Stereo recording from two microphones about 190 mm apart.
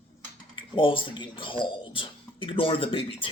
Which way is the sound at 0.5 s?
25° left (ahead or behind).